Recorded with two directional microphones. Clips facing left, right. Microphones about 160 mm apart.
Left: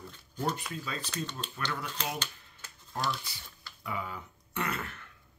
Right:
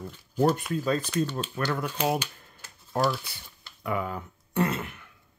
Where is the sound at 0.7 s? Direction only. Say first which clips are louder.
Right 12 dB; 50° right (ahead or behind).